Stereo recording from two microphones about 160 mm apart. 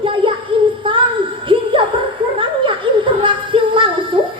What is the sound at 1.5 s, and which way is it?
Music, 30° right (ahead or behind).